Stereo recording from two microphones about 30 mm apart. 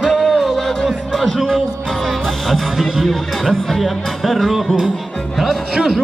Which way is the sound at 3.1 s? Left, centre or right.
Centre.